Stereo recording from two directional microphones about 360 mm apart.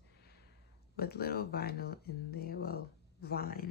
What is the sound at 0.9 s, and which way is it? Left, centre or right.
Speech, left.